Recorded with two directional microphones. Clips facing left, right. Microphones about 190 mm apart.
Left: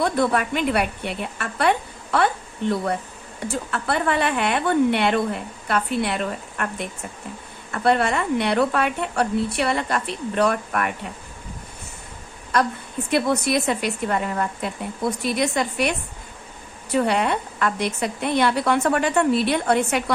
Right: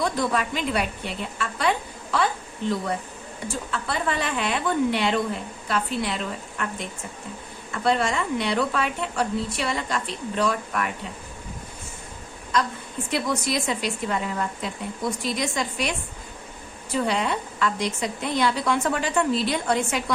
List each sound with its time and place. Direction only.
0.0 s a woman's voice: 60° left (ahead or behind)
13.1 s a woman's voice: 60° left (ahead or behind)